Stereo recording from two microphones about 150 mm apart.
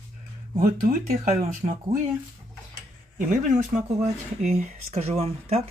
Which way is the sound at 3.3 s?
55° right (ahead or behind).